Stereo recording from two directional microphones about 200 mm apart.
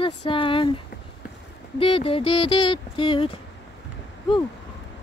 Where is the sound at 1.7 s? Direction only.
30° left (ahead or behind).